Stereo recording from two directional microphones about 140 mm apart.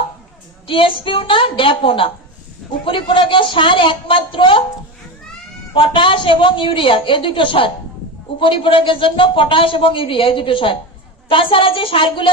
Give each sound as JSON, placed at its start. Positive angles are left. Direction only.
{"t": 0.7, "sound": "a man's voice", "side_deg": 40}
{"t": 5.7, "sound": "a man's voice", "side_deg": 35}